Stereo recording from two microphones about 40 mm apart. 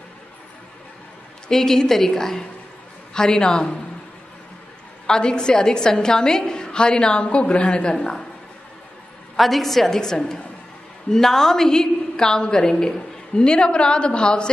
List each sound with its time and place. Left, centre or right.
1.5 s a woman's voice: centre
5.0 s a woman's voice: centre
9.4 s a woman's voice: centre; by 14.5 s left